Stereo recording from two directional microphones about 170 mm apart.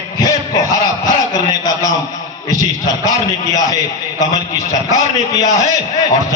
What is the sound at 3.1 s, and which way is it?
A man's voice, 20° left (ahead or behind).